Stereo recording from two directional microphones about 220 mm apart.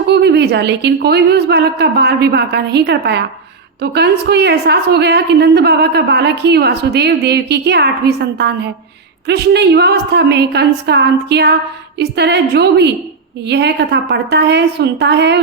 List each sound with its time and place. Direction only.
0.1 s a woman's voice: 50° right (ahead or behind)